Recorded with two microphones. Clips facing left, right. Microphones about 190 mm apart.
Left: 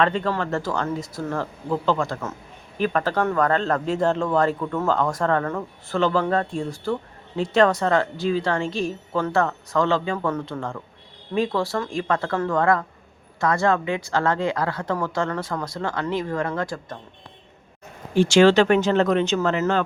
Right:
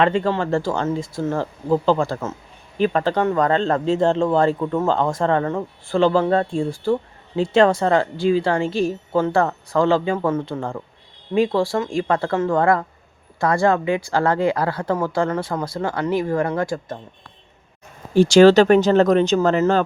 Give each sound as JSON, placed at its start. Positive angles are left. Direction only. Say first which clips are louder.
{"t": 0.0, "sound": "a woman's voice", "louder": "right 3 dB", "side_deg": -30}
{"t": 18.1, "sound": "a woman's voice", "louder": "right 4 dB", "side_deg": -40}